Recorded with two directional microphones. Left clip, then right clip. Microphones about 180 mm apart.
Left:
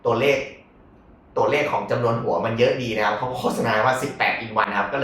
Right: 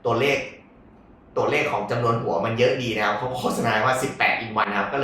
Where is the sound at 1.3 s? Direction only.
Centre (ahead or behind).